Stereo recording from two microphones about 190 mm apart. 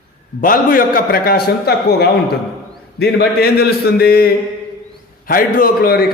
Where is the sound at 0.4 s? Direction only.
45° left (ahead or behind).